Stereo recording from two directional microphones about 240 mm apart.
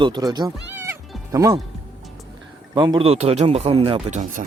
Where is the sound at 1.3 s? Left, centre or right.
Centre.